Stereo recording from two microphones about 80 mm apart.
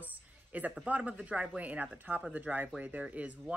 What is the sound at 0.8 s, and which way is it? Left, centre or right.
Speech, centre.